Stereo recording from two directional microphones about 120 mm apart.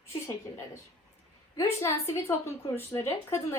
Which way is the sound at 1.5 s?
20° left (ahead or behind).